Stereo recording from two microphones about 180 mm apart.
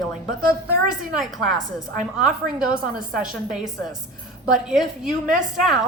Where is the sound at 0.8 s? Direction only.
Centre (ahead or behind).